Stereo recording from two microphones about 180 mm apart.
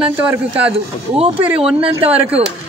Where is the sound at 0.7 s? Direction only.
30° right (ahead or behind).